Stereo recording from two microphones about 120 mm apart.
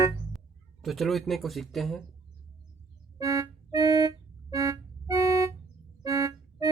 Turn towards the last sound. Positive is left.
turn(degrees=-30)  # may be behind; listen again after turning